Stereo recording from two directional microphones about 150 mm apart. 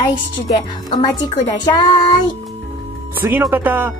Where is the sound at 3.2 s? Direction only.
15° right (ahead or behind).